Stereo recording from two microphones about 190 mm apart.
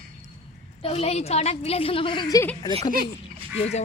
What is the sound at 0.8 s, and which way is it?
Speech, 30° left (ahead or behind).